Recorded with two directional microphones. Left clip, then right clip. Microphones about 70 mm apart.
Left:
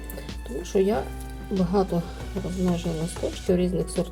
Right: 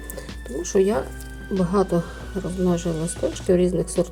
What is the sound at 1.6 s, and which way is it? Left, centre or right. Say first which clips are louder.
Speech: right 3 dB; right.